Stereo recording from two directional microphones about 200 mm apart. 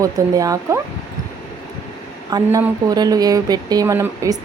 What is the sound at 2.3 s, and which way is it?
Speech, 20° right (ahead or behind).